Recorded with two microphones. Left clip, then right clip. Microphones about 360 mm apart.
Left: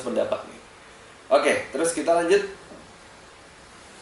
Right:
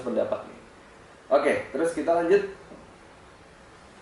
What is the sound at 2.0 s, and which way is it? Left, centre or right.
Speech, centre.